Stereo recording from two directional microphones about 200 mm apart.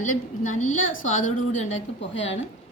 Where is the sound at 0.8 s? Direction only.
80° left.